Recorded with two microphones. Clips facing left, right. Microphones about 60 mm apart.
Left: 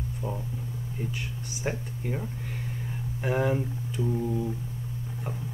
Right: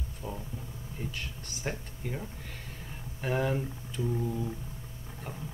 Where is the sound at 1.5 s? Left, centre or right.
Centre.